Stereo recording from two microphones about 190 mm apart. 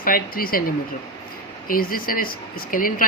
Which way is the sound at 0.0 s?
50° left (ahead or behind).